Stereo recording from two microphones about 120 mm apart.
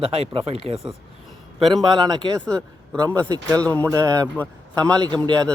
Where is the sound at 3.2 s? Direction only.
30° right (ahead or behind).